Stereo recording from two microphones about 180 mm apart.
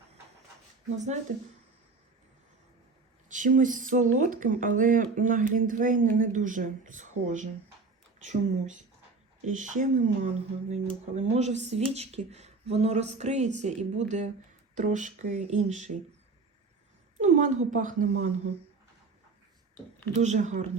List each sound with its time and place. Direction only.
0.9 s speech: 40° right (ahead or behind)
3.2 s speech: 45° right (ahead or behind)
17.2 s speech: 45° right (ahead or behind)
20.1 s speech: 40° right (ahead or behind)